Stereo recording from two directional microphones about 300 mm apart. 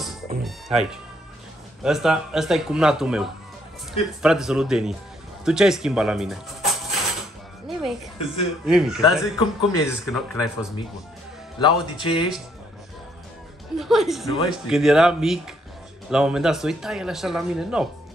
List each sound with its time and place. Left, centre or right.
0.4 s speech: centre
7.6 s music: centre
8.6 s speech: centre
9.2 s a man's voice: centre
10.0 s speech: centre
11.6 s a man's voice: centre
13.7 s speech: centre